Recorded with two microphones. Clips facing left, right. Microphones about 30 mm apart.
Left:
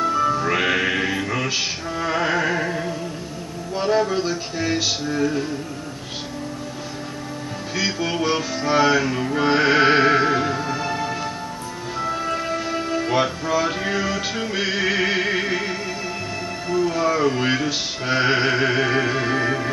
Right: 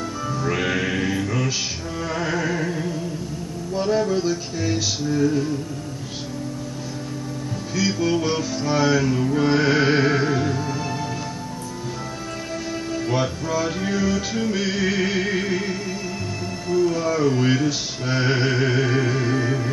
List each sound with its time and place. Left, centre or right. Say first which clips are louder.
0.0 s music: left 7 dB; left
7.7 s music: right 2 dB; left
12.3 s music: left 5 dB; left